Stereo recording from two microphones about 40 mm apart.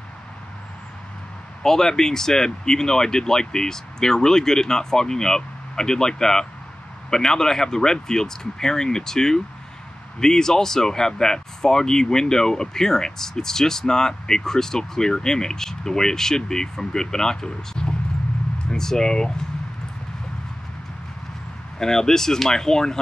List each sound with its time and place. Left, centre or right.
1.6 s speech: centre
21.7 s speech: centre